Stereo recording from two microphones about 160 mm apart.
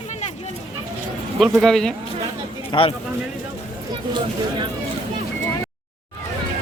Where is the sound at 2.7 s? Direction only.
35° left (ahead or behind).